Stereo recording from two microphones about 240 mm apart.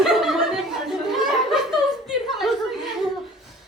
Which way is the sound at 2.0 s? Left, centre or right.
Centre.